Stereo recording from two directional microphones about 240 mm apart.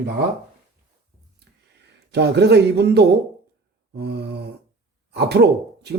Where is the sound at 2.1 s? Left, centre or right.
Right.